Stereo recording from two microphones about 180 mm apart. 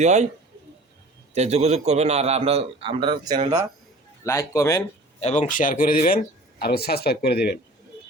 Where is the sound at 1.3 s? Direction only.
35° right (ahead or behind).